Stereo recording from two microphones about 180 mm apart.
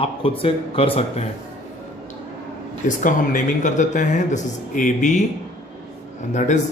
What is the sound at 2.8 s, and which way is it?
Speech, 45° left (ahead or behind).